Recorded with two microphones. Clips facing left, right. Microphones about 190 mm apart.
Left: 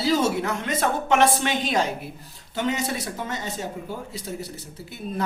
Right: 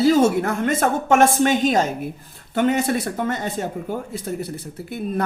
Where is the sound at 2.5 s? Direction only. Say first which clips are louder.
Right 7 dB; 55° right (ahead or behind).